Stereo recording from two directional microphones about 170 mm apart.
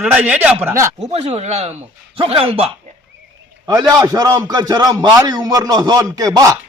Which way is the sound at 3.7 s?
25° right (ahead or behind).